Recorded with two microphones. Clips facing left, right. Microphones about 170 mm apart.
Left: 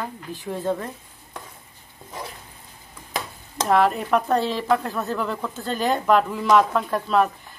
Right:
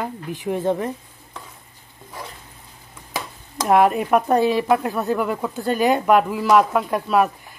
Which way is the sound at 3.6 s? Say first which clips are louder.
Right 3 dB; 10° right (ahead or behind).